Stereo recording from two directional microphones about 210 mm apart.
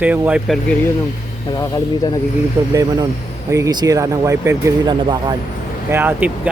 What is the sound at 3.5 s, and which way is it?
Speech, 15° right (ahead or behind).